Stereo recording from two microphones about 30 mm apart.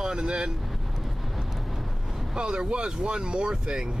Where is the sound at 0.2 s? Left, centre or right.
Right.